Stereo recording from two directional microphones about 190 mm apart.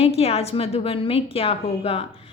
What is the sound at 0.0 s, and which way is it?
A woman's voice, 30° left (ahead or behind).